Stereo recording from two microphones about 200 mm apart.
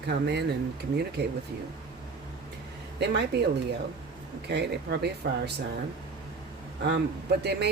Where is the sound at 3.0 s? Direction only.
60° right (ahead or behind).